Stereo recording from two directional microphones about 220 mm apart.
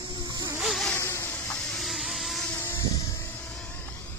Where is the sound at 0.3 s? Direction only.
10° right (ahead or behind).